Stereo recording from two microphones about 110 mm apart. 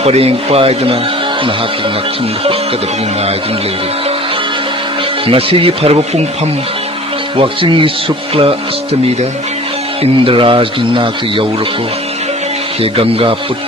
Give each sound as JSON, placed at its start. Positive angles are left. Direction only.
{"t": 0.0, "sound": "speech", "side_deg": -65}
{"t": 5.2, "sound": "speech", "side_deg": -55}
{"t": 7.3, "sound": "speech", "side_deg": -55}
{"t": 10.0, "sound": "speech", "side_deg": -55}
{"t": 12.8, "sound": "speech", "side_deg": -60}